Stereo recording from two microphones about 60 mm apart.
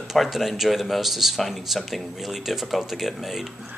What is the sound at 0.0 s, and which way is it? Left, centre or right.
Speech, centre.